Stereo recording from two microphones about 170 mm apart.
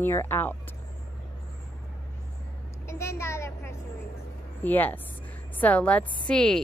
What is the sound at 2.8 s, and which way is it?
Vehicle, 15° left (ahead or behind).